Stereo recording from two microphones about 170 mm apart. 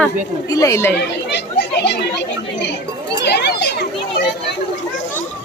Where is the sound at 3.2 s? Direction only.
75° left (ahead or behind).